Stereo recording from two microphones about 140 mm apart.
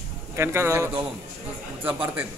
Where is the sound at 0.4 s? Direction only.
20° right (ahead or behind).